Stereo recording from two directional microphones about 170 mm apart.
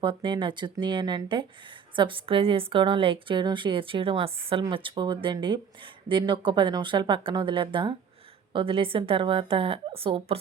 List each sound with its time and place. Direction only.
0.0 s a woman's voice: 30° right (ahead or behind)